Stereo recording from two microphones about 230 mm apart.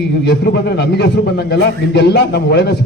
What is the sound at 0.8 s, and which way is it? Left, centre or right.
A man's voice, left.